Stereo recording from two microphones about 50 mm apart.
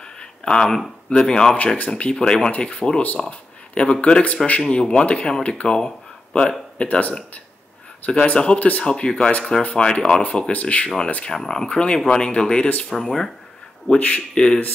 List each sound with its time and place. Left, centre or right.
0.0 s speech: centre
8.5 s speech: left
8.8 s speech: centre
10.5 s speech: left
11.3 s speech: centre
11.7 s speech: left
13.9 s speech: left